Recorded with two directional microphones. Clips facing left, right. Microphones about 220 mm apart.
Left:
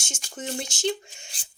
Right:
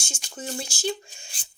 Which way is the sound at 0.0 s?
25° left (ahead or behind).